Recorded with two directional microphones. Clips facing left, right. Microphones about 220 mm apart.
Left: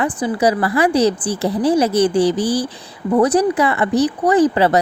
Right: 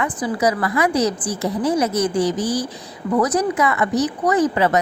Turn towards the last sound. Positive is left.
turn(degrees=30)  # may be behind; listen again after turning